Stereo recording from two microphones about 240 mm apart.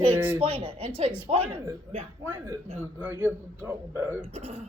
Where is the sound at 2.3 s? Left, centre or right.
Centre.